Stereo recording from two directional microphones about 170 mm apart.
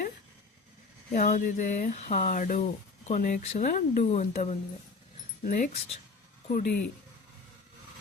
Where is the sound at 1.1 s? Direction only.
50° left (ahead or behind).